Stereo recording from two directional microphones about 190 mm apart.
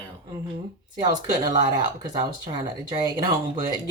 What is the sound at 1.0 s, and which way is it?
Speech, 20° right (ahead or behind).